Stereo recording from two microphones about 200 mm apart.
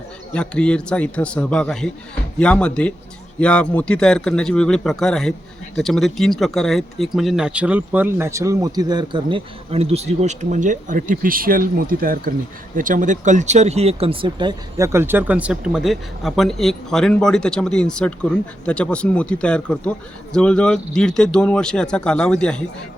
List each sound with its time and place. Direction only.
0.3 s speech: 5° left (ahead or behind)